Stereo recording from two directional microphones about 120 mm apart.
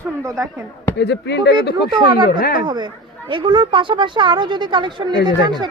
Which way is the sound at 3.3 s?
40° right (ahead or behind).